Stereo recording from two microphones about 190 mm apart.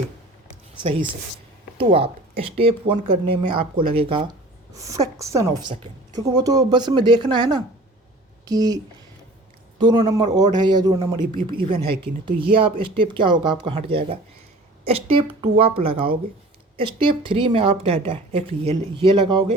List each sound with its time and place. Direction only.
0.8 s speech: 30° right (ahead or behind)